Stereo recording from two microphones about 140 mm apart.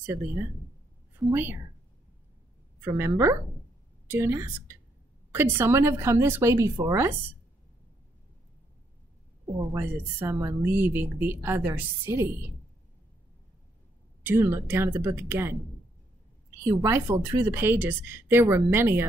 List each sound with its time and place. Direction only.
1.3 s a woman's voice: 15° right (ahead or behind)
2.8 s a woman's voice: 20° right (ahead or behind)
9.8 s a woman's voice: 15° right (ahead or behind)
14.2 s a woman's voice: 15° right (ahead or behind)
16.6 s a woman's voice: 20° right (ahead or behind)